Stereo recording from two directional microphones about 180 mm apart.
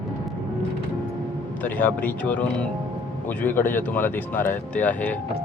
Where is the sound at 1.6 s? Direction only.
10° left (ahead or behind).